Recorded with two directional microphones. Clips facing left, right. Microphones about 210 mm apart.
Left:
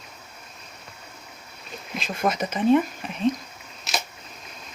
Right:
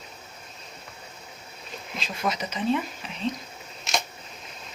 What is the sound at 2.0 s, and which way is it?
Speech, 50° left (ahead or behind).